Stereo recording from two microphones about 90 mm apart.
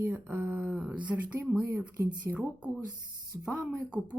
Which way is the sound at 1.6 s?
35° right (ahead or behind).